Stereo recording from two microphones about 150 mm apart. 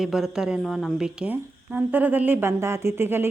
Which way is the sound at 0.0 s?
Centre (ahead or behind).